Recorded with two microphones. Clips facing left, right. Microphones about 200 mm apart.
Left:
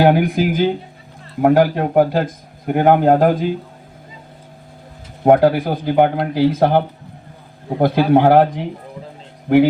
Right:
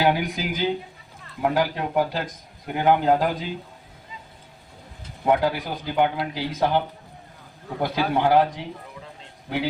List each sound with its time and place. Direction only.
0.0 s a man's voice: 55° left (ahead or behind)
5.2 s a man's voice: 50° left (ahead or behind)